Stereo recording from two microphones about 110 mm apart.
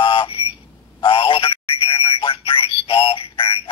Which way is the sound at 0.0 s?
55° left (ahead or behind).